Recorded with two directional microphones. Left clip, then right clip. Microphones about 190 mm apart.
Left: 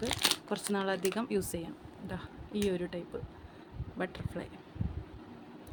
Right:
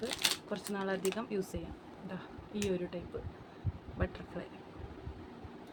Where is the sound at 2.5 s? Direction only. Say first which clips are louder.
Left 5 dB; 45° left (ahead or behind).